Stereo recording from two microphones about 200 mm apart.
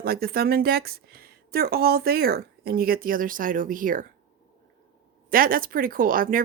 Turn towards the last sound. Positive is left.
turn(degrees=-45)  # may be behind; listen again after turning